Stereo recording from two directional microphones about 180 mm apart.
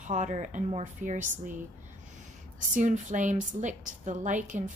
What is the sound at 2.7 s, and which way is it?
Speech, 45° right (ahead or behind).